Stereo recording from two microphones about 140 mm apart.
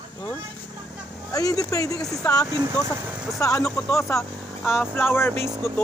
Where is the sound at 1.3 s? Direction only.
25° left (ahead or behind).